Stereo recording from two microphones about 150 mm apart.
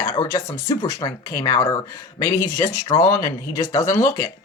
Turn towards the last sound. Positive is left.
turn(degrees=20)  # may be behind; listen again after turning